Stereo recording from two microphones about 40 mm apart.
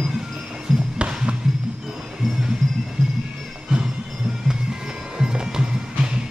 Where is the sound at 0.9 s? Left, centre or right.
Right.